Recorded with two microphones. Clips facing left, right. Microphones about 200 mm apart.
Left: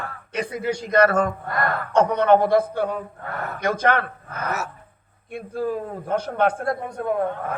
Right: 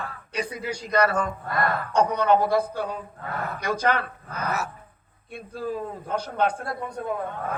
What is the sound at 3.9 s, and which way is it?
Speech, 45° left (ahead or behind).